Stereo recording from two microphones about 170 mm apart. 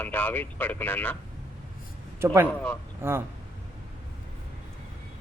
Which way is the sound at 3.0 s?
15° right (ahead or behind).